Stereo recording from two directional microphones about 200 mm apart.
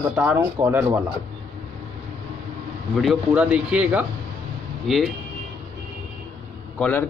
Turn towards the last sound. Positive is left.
turn(degrees=5)  # may be behind; listen again after turning